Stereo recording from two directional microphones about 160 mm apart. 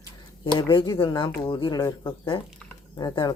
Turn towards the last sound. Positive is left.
turn(degrees=25)  # may be behind; listen again after turning